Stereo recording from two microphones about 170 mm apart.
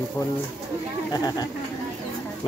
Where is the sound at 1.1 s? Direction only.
25° left (ahead or behind).